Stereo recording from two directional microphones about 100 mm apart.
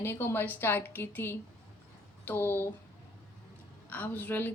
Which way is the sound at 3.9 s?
15° left (ahead or behind).